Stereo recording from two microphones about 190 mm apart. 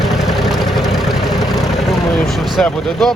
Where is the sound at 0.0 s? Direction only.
Centre (ahead or behind).